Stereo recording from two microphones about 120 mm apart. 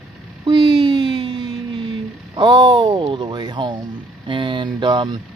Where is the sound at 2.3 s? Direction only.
40° right (ahead or behind).